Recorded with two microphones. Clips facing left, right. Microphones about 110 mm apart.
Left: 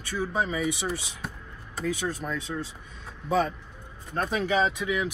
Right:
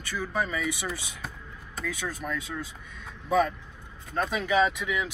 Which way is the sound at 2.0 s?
30° left (ahead or behind).